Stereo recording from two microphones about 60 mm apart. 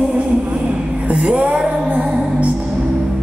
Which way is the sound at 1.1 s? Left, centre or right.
Centre.